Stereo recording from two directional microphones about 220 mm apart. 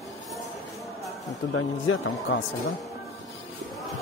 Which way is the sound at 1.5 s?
60° left (ahead or behind).